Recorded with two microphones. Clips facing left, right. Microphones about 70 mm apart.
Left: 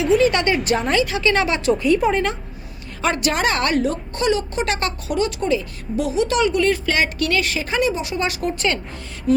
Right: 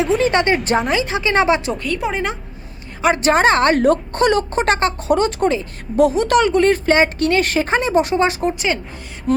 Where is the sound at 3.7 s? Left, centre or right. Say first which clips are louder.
Right 6 dB; right.